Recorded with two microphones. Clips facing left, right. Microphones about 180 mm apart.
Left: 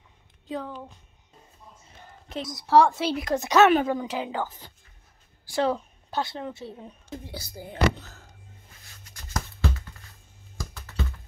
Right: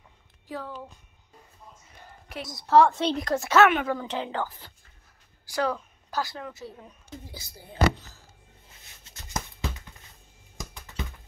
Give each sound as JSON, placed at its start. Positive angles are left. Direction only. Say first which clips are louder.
{"t": 0.5, "sound": "speech", "louder": "left 3 dB", "side_deg": 20}
{"t": 2.4, "sound": "a woman's voice", "louder": "left 4 dB", "side_deg": 0}
{"t": 2.7, "sound": "a woman's voice", "louder": "even", "side_deg": 10}
{"t": 3.3, "sound": "a woman's voice", "louder": "left 2 dB", "side_deg": 20}
{"t": 5.4, "sound": "speech", "louder": "left 3 dB", "side_deg": 25}
{"t": 7.3, "sound": "speech", "louder": "right 2 dB", "side_deg": 80}
{"t": 8.6, "sound": "a sound", "louder": "left 2 dB", "side_deg": -25}
{"t": 10.6, "sound": "computer keyboard", "louder": "left 3 dB", "side_deg": -15}